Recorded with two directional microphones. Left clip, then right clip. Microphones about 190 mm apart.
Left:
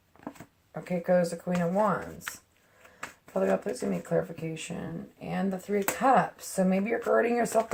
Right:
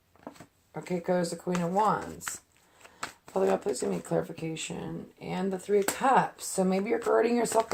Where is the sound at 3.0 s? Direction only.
30° right (ahead or behind).